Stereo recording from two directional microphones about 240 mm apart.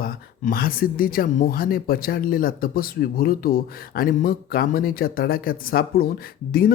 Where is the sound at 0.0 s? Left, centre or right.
Left.